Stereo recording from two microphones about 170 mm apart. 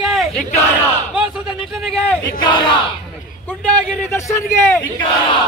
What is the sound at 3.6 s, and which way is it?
A man's voice, 15° left (ahead or behind).